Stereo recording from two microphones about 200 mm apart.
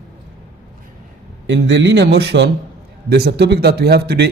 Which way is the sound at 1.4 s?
60° right (ahead or behind).